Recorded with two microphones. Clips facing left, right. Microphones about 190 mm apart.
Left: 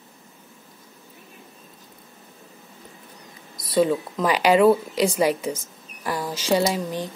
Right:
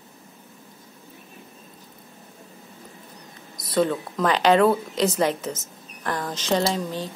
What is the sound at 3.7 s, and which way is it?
A woman's voice, 10° left (ahead or behind).